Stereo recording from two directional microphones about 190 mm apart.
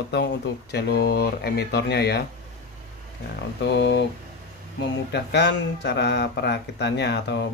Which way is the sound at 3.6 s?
65° left (ahead or behind).